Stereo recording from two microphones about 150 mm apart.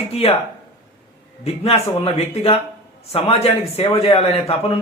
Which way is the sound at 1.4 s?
40° left (ahead or behind).